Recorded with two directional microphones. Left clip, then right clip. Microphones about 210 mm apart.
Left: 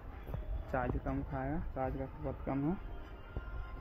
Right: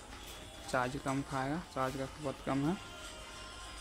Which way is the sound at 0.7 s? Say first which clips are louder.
Right 3 dB; 20° right (ahead or behind).